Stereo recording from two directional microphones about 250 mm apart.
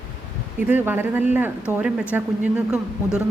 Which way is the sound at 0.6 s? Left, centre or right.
Centre.